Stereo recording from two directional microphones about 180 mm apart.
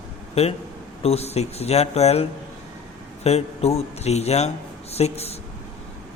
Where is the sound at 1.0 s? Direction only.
35° left (ahead or behind).